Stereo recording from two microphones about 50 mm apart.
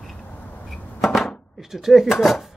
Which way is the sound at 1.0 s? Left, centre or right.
Centre.